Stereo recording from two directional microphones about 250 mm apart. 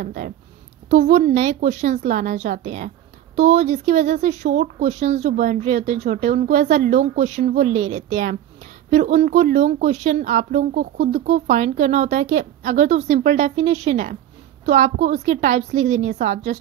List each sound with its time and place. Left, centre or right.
0.0 s a woman's voice: right